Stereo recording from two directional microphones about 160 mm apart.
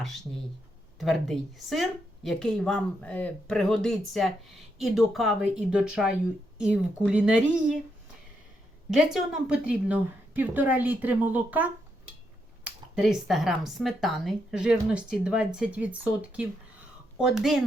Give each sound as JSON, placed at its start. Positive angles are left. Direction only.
{"t": 0.9, "sound": "a woman's voice", "side_deg": 0}
{"t": 8.9, "sound": "a woman's voice", "side_deg": -5}